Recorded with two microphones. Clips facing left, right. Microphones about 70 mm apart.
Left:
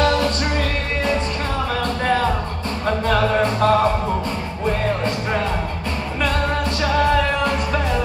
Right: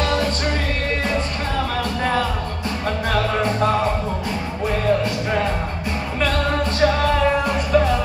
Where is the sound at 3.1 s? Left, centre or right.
Left.